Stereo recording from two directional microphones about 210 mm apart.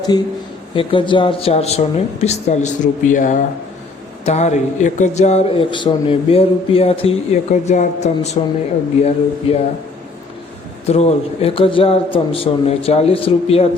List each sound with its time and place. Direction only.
0.1 s speech: 20° left (ahead or behind)
10.8 s speech: 30° left (ahead or behind)